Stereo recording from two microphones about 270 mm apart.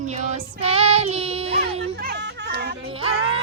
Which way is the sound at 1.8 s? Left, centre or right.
Right.